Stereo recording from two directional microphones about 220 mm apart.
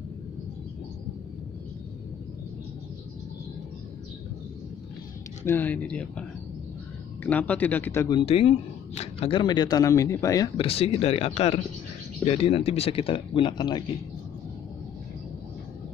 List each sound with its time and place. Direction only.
5.4 s speech: 10° left (ahead or behind)
7.2 s speech: 5° left (ahead or behind)